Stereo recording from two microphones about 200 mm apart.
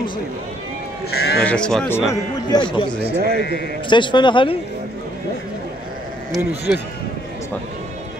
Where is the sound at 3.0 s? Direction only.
55° right (ahead or behind).